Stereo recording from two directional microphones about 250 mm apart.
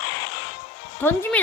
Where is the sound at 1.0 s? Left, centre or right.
Centre.